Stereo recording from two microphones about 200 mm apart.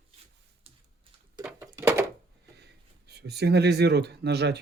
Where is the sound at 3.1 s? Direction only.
55° right (ahead or behind).